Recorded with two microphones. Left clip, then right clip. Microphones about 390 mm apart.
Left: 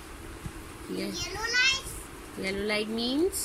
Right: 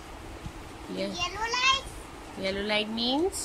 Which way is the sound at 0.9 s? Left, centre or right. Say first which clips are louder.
Right 3 dB; centre.